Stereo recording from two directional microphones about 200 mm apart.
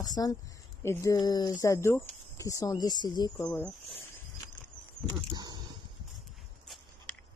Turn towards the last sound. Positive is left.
turn(degrees=-20)  # may be behind; listen again after turning